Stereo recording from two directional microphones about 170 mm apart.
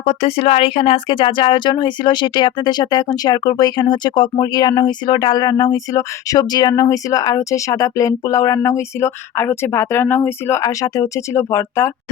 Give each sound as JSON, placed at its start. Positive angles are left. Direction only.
{"t": 0.0, "sound": "speech", "side_deg": 35}